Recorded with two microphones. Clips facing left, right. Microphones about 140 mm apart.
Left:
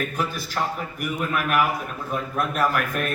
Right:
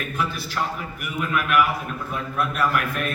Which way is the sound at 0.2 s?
40° left (ahead or behind).